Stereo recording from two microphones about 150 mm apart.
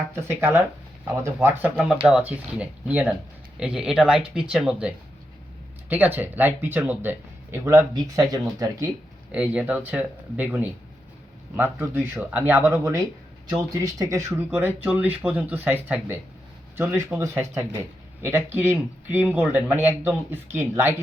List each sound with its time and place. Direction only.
0.2 s speech: 15° right (ahead or behind)
9.3 s speech: 10° right (ahead or behind)